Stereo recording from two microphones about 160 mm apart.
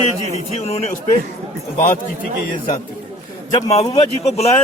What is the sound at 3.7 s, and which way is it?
Speech, 40° left (ahead or behind).